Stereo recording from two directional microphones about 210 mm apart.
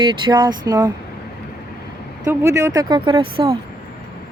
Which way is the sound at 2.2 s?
15° right (ahead or behind).